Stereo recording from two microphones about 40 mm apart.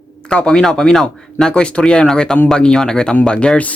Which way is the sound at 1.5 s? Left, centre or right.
Left.